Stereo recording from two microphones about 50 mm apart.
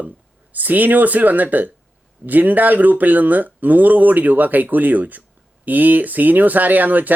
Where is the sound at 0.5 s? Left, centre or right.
Right.